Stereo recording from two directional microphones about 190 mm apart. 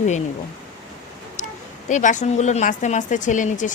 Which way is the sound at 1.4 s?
40° left (ahead or behind).